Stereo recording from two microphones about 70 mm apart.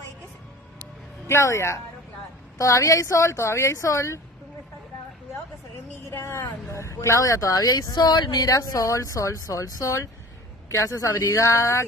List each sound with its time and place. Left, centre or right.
1.2 s speech: left
6.0 s speech: left